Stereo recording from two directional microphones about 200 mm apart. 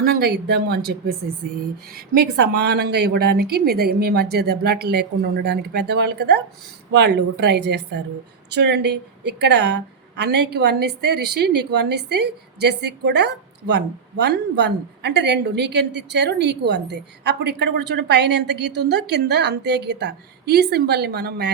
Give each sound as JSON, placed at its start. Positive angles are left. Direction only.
{"t": 0.0, "sound": "a woman's voice", "side_deg": -50}
{"t": 2.1, "sound": "a woman's voice", "side_deg": -55}